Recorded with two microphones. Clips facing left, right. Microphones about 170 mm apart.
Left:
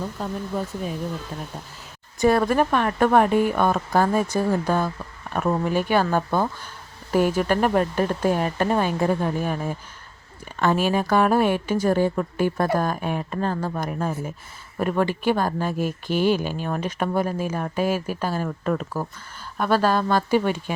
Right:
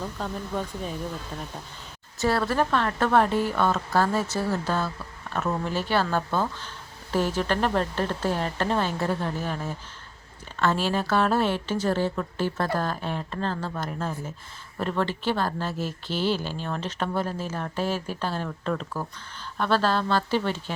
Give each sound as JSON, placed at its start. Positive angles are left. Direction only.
{"t": 0.2, "sound": "speech", "side_deg": 5}
{"t": 2.1, "sound": "speech", "side_deg": 15}